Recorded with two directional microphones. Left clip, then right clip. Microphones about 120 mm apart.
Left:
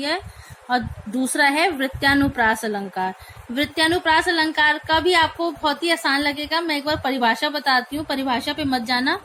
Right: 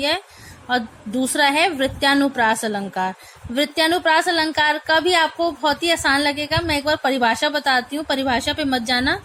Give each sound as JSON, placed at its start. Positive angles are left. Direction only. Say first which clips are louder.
{"t": 0.7, "sound": "a woman's voice", "louder": "right 1 dB", "side_deg": -40}